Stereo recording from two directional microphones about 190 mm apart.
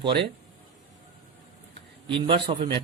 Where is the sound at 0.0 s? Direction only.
25° right (ahead or behind).